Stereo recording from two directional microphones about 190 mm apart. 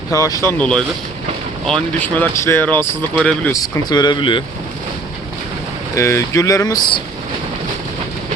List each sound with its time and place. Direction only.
0.1 s speech: 15° left (ahead or behind)
0.6 s speech: 5° left (ahead or behind)
3.5 s speech: 20° left (ahead or behind)
6.0 s speech: 15° left (ahead or behind)